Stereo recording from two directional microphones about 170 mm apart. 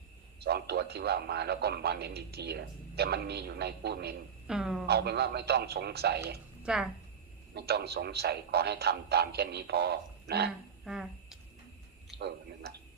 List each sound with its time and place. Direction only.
0.3 s speech: 75° right (ahead or behind)
4.4 s a woman's voice: 5° right (ahead or behind)
4.9 s speech: 70° right (ahead or behind)
6.6 s a woman's voice: 5° right (ahead or behind)
7.5 s speech: 70° right (ahead or behind)
10.8 s a sound: 5° right (ahead or behind)